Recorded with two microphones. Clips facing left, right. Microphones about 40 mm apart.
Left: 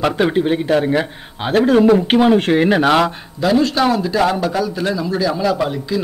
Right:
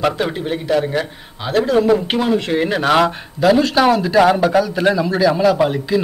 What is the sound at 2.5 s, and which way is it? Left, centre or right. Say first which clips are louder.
Speech: left 4 dB; centre.